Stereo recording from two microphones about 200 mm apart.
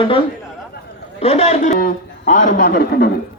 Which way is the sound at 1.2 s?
30° left (ahead or behind).